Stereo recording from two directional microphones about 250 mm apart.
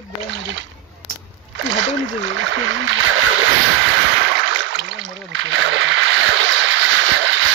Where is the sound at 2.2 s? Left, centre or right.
Right.